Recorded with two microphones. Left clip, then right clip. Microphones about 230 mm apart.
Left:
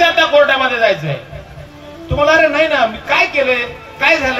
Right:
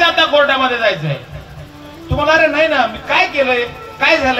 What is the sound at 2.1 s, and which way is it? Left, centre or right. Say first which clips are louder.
A man's voice: left 1 dB; left.